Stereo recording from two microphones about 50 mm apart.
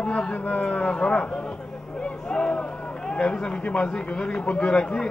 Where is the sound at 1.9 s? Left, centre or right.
Centre.